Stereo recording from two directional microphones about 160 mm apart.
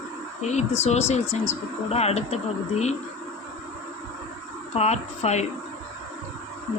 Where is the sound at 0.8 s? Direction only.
40° left (ahead or behind).